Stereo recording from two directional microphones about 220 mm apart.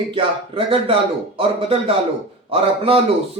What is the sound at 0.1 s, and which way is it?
A man's voice, 25° right (ahead or behind).